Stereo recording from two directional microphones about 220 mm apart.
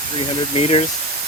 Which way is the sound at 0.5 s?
25° left (ahead or behind).